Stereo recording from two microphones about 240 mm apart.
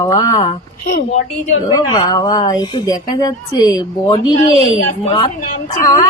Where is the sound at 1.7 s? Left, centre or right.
Centre.